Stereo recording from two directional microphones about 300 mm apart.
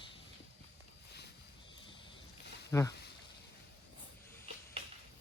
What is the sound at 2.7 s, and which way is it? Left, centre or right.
Speech, centre.